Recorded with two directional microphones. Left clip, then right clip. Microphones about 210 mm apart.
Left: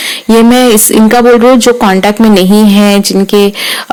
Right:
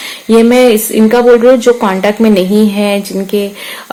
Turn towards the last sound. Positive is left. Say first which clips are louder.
# left 8 dB
turn(degrees=40)  # may be behind; listen again after turning